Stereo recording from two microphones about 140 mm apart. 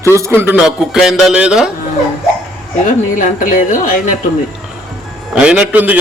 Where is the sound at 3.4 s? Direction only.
70° left (ahead or behind).